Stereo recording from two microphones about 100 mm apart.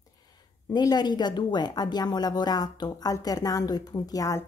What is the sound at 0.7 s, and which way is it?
A woman's voice, 40° left (ahead or behind).